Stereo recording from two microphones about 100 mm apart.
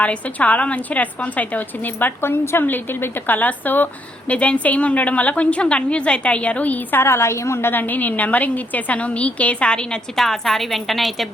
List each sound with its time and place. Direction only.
0.0 s a woman's voice: 15° left (ahead or behind)